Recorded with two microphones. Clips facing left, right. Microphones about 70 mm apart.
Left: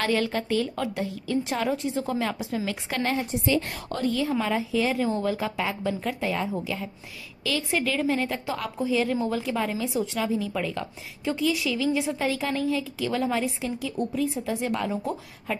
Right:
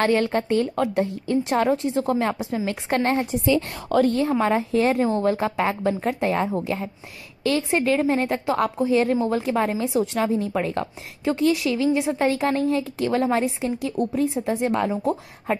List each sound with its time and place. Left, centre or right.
0.0 s a woman's voice: right
1.4 s a woman's voice: right
2.1 s a woman's voice: right